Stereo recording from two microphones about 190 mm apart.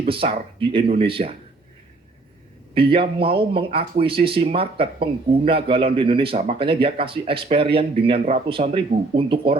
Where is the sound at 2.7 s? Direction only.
30° right (ahead or behind).